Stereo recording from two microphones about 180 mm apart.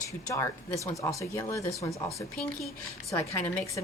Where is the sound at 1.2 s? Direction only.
15° left (ahead or behind).